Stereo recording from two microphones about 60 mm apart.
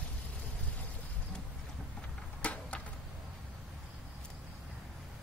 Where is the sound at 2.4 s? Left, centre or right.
Left.